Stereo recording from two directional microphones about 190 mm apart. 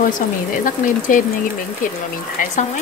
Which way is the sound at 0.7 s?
45° left (ahead or behind).